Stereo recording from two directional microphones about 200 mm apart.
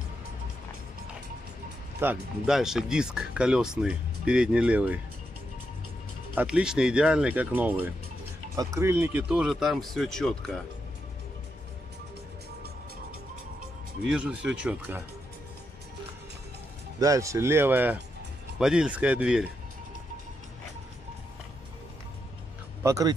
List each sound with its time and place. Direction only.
2.0 s speech: 5° right (ahead or behind)
6.3 s speech: 5° right (ahead or behind)
14.0 s speech: 5° right (ahead or behind)
17.0 s speech: 15° right (ahead or behind)
22.8 s speech: 15° right (ahead or behind)